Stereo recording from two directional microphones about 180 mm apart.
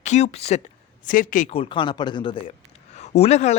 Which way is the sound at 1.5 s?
30° left (ahead or behind).